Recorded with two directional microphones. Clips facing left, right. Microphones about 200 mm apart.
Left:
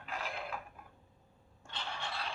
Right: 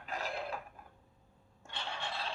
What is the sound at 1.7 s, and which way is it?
Scrape, 20° right (ahead or behind).